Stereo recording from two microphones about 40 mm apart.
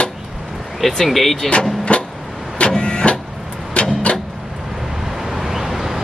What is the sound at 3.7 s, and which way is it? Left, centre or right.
Vehicle, left.